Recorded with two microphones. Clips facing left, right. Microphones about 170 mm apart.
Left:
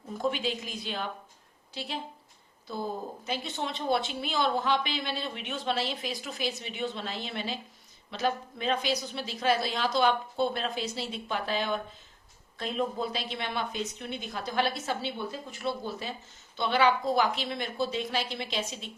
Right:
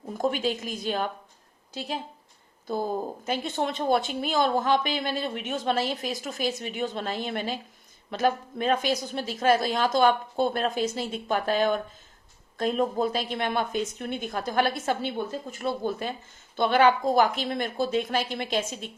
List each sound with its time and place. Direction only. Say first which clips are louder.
0.2 s a woman's voice: right 4 dB; 45° right (ahead or behind)